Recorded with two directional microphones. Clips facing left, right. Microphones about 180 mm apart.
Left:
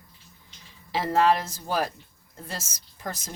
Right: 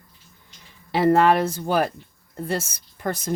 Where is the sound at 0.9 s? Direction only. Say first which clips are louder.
Right 5 dB; 60° right (ahead or behind).